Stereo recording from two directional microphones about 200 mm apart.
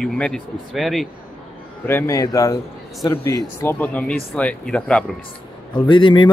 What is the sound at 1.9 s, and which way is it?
A man's voice, 15° left (ahead or behind).